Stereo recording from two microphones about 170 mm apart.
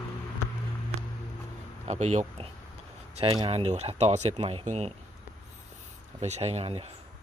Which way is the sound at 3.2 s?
30° right (ahead or behind).